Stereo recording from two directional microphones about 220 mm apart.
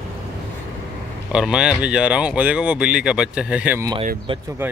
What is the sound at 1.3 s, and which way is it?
Speech, 5° right (ahead or behind).